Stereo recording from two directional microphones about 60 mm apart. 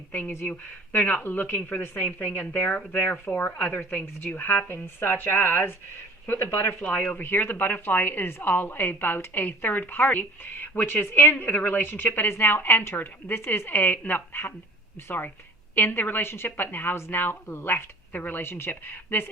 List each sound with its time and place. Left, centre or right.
0.1 s a woman's voice: left
6.8 s a woman's voice: left
7.2 s a woman's voice: left
15.7 s a woman's voice: left